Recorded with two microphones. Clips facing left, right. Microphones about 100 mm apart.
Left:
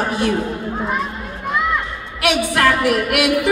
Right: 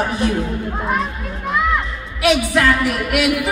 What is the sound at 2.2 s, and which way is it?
Music, 55° left (ahead or behind).